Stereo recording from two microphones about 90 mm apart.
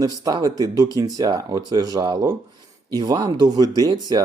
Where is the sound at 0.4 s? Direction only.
40° right (ahead or behind).